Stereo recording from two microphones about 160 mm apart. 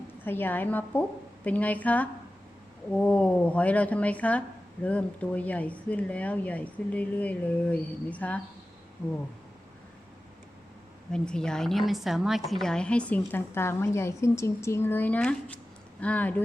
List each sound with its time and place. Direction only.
0.3 s speech: 10° left (ahead or behind)
11.1 s speech: 5° left (ahead or behind)